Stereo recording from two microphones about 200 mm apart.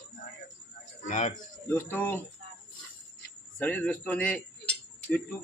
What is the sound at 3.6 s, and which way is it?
Speech, 5° left (ahead or behind).